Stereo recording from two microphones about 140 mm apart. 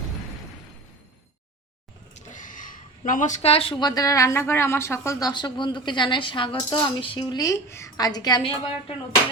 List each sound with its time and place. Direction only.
2.3 s speech: 70° left (ahead or behind); by 5.3 s 20° left (ahead or behind)
5.3 s speech: 35° left (ahead or behind)